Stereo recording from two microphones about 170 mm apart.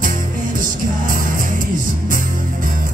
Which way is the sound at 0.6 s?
55° right (ahead or behind).